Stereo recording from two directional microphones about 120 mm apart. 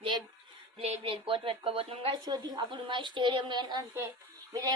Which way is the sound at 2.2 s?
35° right (ahead or behind).